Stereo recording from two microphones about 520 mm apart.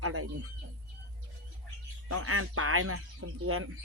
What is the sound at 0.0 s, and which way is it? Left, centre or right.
Speech, right.